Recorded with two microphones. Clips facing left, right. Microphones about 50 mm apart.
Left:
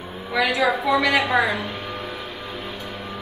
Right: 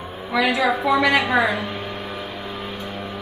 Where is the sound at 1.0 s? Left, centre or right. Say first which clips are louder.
Right 1 dB; centre.